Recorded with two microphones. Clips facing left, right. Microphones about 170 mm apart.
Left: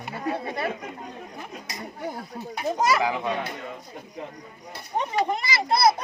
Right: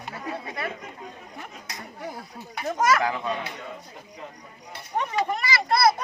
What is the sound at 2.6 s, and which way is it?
Speech, 15° left (ahead or behind).